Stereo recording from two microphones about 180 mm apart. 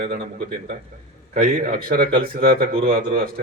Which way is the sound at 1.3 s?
50° right (ahead or behind).